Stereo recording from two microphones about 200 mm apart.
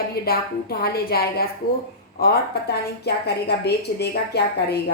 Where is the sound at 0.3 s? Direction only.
50° left (ahead or behind).